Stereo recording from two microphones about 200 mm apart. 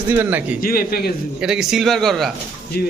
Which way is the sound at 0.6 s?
50° left (ahead or behind).